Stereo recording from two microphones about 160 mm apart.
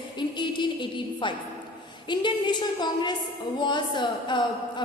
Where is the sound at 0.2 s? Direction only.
30° left (ahead or behind).